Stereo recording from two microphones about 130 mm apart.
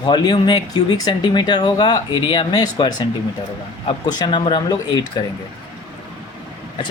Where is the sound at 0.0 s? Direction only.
35° left (ahead or behind).